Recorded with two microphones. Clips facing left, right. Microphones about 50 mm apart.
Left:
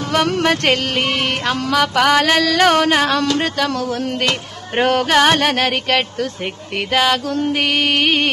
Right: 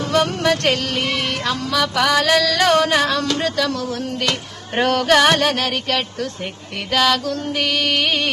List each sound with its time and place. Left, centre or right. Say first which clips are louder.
0.0 s music: even; left
0.4 s speech: left 2 dB; left
3.3 s music: left 2 dB; left
3.6 s speech: left 3 dB; left
4.7 s music: left 1 dB; left
5.4 s speech: left 2 dB; left
6.9 s music: left 1 dB; centre; by 8.3 s left